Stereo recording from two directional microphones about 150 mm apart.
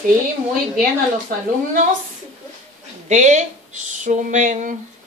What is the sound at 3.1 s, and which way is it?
A woman's voice, 55° right (ahead or behind).